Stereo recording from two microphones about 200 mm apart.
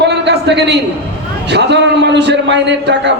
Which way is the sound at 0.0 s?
60° right (ahead or behind).